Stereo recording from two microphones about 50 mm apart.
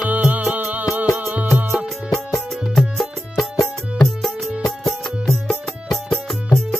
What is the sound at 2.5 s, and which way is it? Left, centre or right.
Music, centre.